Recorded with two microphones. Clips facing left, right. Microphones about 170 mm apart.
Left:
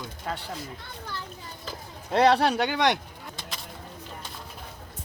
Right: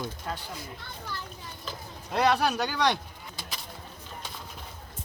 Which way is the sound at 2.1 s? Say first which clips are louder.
Left 4 dB; 30° left (ahead or behind).